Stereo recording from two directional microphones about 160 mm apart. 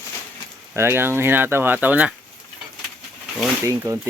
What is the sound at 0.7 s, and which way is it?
Speech, 15° right (ahead or behind).